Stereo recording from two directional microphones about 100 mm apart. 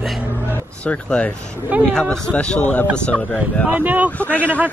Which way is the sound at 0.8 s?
10° left (ahead or behind).